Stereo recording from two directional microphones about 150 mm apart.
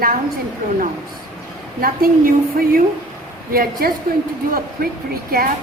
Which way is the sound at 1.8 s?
75° right (ahead or behind).